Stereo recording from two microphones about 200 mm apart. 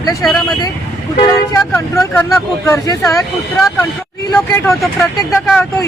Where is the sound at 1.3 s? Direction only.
15° left (ahead or behind).